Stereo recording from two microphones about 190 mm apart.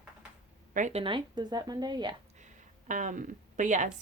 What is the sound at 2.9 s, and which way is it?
Speech, 40° right (ahead or behind).